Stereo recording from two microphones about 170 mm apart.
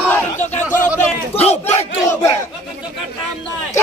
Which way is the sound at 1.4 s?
40° left (ahead or behind).